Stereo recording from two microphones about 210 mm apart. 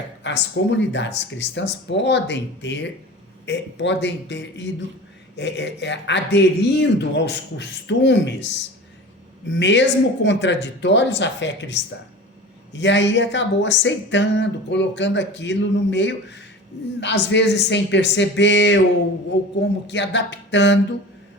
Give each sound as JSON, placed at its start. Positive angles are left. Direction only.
{"t": 0.2, "sound": "speech", "side_deg": 55}
{"t": 19.9, "sound": "speech", "side_deg": 60}